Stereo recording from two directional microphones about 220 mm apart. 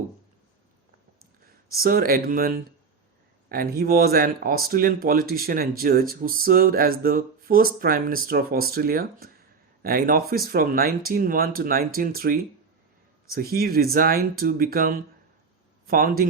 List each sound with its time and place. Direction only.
1.7 s speech: 40° right (ahead or behind)